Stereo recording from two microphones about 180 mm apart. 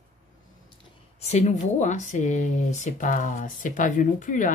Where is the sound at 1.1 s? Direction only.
40° left (ahead or behind).